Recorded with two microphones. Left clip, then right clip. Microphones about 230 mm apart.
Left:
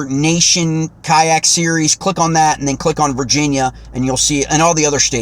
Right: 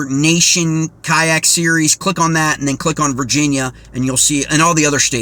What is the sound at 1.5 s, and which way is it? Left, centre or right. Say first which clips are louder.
Speech: even; left.